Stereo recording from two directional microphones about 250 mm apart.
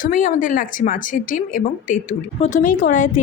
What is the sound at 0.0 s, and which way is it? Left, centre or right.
A woman's voice, left.